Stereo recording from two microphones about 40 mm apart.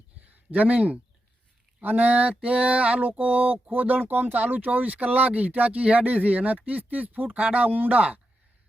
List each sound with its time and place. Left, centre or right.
0.3 s speech: right